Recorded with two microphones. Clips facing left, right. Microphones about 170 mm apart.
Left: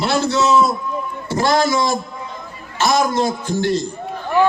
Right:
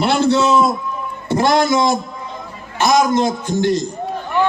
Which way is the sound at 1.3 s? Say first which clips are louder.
Right 2 dB; 20° right (ahead or behind).